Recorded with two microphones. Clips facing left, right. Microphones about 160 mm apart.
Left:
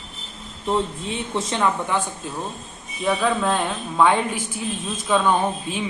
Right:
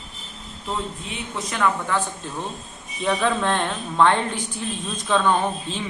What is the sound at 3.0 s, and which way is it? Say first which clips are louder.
Speech: left 1 dB; centre (ahead or behind).